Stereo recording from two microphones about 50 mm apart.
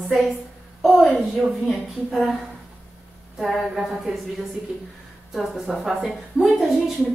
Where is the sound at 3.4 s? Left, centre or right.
Centre.